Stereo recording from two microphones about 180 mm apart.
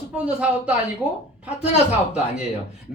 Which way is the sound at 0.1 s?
5° right (ahead or behind).